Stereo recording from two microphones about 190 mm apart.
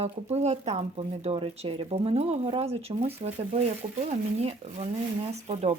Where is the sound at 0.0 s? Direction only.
35° right (ahead or behind).